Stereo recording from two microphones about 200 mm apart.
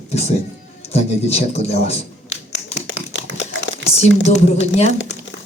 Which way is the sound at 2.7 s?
60° left (ahead or behind).